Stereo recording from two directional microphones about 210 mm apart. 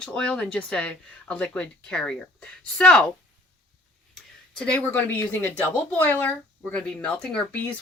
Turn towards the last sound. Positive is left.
turn(degrees=5)  # may be behind; listen again after turning